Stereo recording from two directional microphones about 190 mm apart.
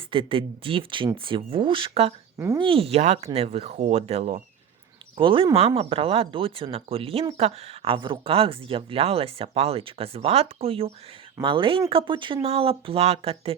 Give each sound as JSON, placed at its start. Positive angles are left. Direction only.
{"t": 0.1, "sound": "speech", "side_deg": -25}